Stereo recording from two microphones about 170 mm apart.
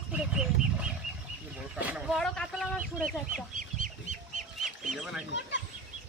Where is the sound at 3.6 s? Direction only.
50° right (ahead or behind).